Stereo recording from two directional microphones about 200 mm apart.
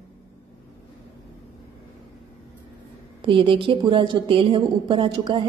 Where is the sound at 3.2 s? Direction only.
25° right (ahead or behind).